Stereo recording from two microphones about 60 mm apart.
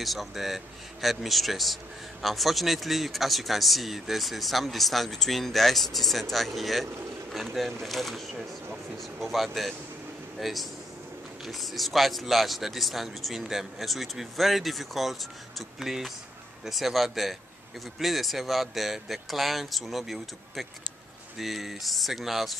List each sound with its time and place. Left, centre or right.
0.0 s speech: centre